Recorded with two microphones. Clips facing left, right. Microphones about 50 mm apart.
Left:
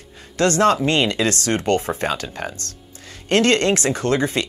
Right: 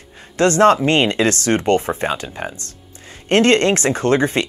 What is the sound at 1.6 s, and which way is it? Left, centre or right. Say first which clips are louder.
Speech: right 3 dB; right.